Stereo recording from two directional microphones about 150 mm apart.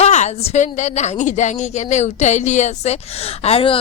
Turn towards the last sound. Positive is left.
turn(degrees=40)  # may be behind; listen again after turning